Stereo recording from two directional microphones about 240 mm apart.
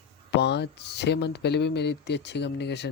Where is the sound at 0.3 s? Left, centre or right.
Left.